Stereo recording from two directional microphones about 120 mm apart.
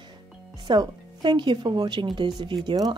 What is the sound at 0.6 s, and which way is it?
Speech, 40° right (ahead or behind).